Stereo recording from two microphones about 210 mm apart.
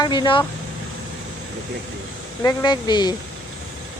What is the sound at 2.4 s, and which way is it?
Speech, 20° left (ahead or behind).